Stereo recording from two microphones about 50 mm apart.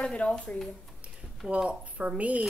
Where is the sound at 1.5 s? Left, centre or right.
Right.